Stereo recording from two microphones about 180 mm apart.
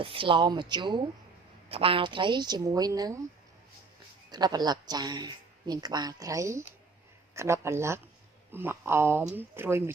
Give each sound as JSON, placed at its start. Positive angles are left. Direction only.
{"t": 0.0, "sound": "speech", "side_deg": -30}
{"t": 4.3, "sound": "speech", "side_deg": -20}